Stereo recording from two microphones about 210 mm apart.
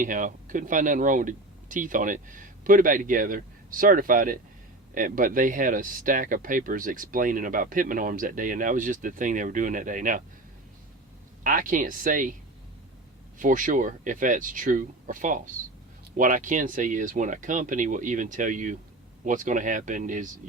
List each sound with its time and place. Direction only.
0.0 s speech: 40° right (ahead or behind)
11.4 s speech: 40° right (ahead or behind)
13.4 s speech: 40° right (ahead or behind)